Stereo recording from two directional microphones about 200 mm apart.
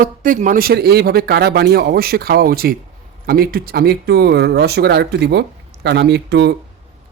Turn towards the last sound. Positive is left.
turn(degrees=-55)  # may be behind; listen again after turning